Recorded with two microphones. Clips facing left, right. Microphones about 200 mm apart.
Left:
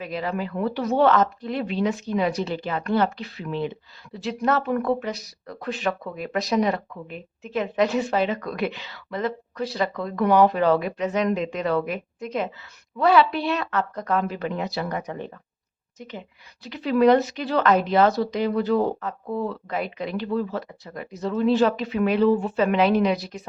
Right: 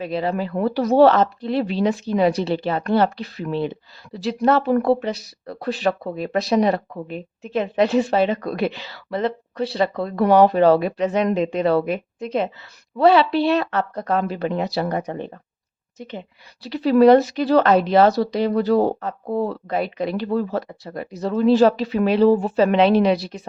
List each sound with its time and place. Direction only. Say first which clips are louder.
0.0 s speech: right 5 dB; 30° right (ahead or behind)
16.6 s speech: right 5 dB; 35° right (ahead or behind)